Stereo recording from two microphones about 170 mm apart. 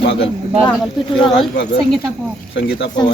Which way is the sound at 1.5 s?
85° left.